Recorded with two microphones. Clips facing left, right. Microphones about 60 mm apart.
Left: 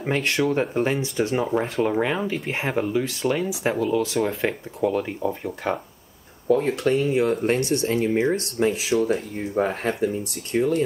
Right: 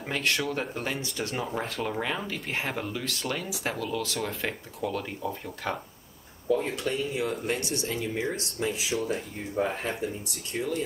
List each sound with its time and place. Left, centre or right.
0.0 s speech: left
6.5 s speech: left